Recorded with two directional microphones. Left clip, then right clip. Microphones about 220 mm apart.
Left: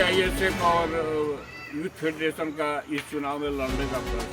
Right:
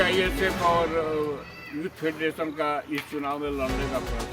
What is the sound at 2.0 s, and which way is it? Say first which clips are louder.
Speech: even; 10° right (ahead or behind).